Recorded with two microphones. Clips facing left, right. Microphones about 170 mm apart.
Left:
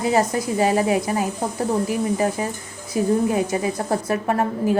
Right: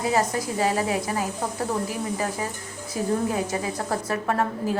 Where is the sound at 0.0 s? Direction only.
25° left (ahead or behind).